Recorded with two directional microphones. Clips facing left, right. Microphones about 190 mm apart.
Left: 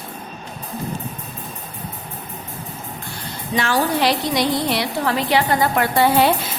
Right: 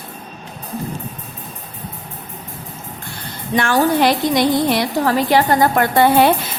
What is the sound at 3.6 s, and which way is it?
A woman's voice, 50° right (ahead or behind).